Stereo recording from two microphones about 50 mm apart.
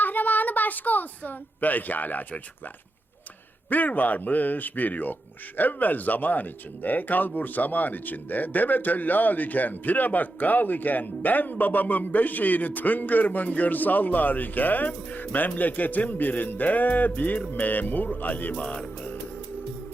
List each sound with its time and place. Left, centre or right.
0.0 s speech: left
3.7 s speech: left
18.6 s music: left